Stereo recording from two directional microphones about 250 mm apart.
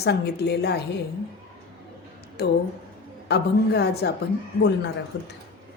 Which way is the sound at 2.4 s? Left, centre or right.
Left.